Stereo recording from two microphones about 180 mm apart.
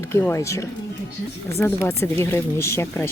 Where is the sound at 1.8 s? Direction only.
15° left (ahead or behind).